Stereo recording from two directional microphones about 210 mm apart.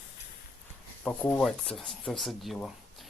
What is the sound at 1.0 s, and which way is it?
Speech, 5° left (ahead or behind).